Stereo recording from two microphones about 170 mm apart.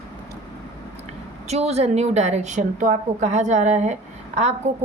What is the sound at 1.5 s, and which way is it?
A woman's voice, 40° right (ahead or behind).